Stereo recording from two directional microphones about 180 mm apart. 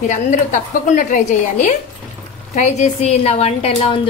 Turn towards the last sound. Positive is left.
turn(degrees=35)  # may be behind; listen again after turning